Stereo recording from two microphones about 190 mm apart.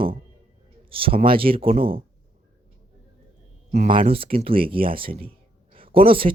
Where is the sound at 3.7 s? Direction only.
30° right (ahead or behind).